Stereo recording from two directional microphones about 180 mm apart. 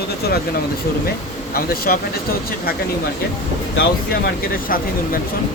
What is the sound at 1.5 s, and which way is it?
Speech, 55° left (ahead or behind).